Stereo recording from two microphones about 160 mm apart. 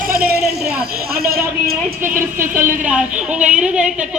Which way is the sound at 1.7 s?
55° right (ahead or behind).